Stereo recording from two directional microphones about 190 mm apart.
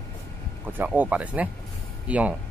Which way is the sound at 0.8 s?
10° right (ahead or behind).